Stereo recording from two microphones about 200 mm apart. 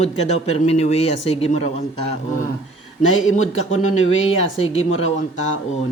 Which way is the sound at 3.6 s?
35° left (ahead or behind).